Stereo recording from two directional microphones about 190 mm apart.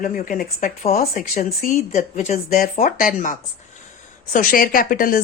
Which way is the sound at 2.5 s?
50° left (ahead or behind).